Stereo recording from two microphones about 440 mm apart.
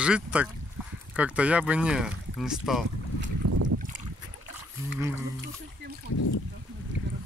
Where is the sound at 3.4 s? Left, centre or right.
Right.